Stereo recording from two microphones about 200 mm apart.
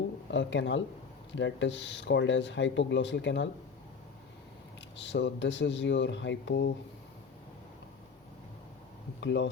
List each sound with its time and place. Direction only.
0.3 s speech: 65° left (ahead or behind)
4.9 s speech: 65° left (ahead or behind)
9.2 s speech: 65° left (ahead or behind)